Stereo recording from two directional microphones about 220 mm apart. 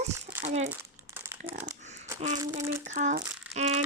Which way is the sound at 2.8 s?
35° right (ahead or behind).